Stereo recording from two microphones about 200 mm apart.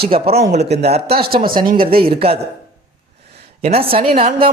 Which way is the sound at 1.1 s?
50° right (ahead or behind).